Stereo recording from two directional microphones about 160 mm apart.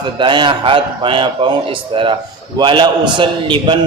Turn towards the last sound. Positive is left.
turn(degrees=-30)  # may be behind; listen again after turning